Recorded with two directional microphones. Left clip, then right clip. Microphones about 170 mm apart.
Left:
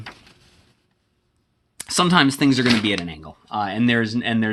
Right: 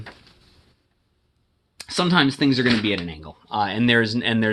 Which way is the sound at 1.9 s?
30° left (ahead or behind).